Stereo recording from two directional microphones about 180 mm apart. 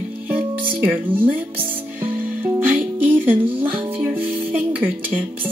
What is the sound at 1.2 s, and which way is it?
Speech, 10° right (ahead or behind).